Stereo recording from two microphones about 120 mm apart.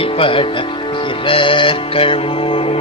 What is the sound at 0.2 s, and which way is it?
Music, 50° left (ahead or behind).